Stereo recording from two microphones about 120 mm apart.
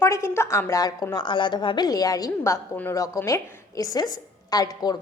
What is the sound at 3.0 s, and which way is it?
A woman's voice, 25° left (ahead or behind).